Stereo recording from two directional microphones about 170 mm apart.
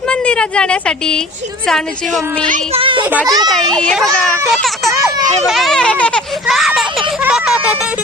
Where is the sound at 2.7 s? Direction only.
30° right (ahead or behind).